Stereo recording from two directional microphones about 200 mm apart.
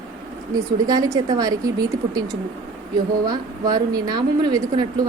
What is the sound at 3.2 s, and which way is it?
A woman's voice, 20° right (ahead or behind).